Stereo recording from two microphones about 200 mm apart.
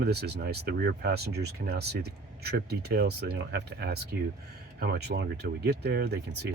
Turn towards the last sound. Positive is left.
turn(degrees=-55)  # may be behind; listen again after turning